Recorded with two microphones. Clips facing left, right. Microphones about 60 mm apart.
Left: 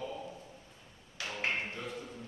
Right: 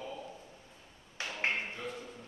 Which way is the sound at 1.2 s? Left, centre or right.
Right.